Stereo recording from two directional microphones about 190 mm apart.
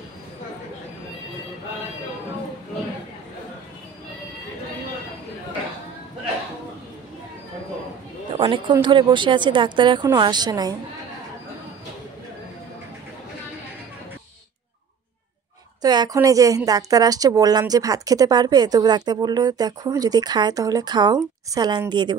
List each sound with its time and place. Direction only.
8.3 s a sound: 25° right (ahead or behind)
8.7 s a woman's voice: 25° right (ahead or behind)
15.8 s a woman's voice: 20° right (ahead or behind)